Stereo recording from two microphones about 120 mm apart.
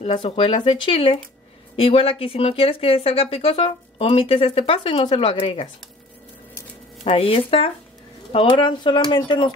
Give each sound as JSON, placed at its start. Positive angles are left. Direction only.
{"t": 0.0, "sound": "speech", "side_deg": 45}
{"t": 7.1, "sound": "speech", "side_deg": 50}